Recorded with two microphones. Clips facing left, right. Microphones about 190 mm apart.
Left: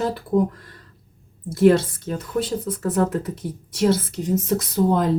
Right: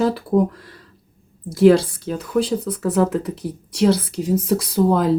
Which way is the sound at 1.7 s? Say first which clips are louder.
Right 3 dB; centre (ahead or behind).